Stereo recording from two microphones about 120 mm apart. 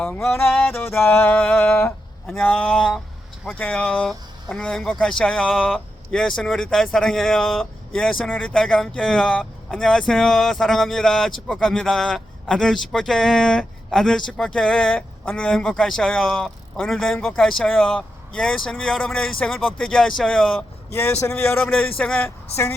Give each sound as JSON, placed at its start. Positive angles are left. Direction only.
{"t": 0.0, "sound": "speech", "side_deg": 5}
{"t": 0.8, "sound": "music", "side_deg": 20}
{"t": 1.1, "sound": "speech", "side_deg": 10}
{"t": 1.5, "sound": "music", "side_deg": 20}
{"t": 2.3, "sound": "speech", "side_deg": 10}
{"t": 20.6, "sound": "a man's voice", "side_deg": 15}